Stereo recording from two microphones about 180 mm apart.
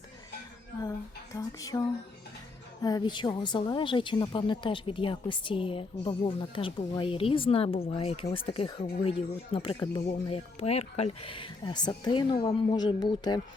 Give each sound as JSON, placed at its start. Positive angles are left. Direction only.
{"t": 0.8, "sound": "a woman's voice", "side_deg": 20}